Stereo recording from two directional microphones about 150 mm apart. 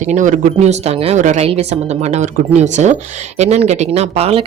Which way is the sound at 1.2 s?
55° right (ahead or behind).